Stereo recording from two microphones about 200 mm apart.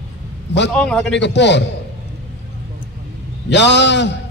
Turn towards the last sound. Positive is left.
turn(degrees=60)  # may be behind; listen again after turning